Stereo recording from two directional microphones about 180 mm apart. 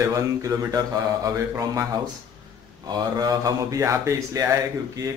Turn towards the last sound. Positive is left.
turn(degrees=-20)  # may be behind; listen again after turning